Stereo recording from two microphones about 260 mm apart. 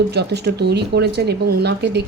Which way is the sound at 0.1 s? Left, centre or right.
Right.